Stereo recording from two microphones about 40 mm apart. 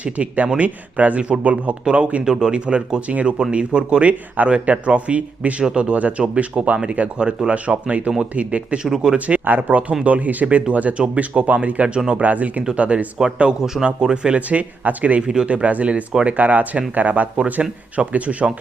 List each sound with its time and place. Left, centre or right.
0.0 s speech: right
2.2 s speech: centre; by 8.8 s right
8.8 s speech: centre
9.1 s speech: right
12.2 s speech: right
13.1 s speech: right
14.4 s speech: right